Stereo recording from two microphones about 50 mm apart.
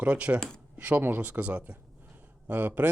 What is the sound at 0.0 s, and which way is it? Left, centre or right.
Speech, right.